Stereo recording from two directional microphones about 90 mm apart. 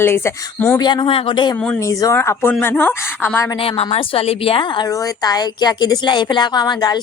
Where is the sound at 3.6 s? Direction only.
90° left.